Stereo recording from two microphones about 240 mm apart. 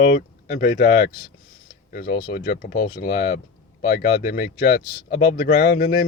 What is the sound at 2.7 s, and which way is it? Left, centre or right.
Speech, centre.